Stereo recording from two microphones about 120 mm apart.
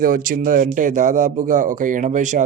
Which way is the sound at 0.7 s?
90° right.